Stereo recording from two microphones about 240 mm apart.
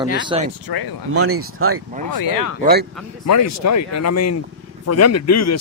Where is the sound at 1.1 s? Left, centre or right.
Right.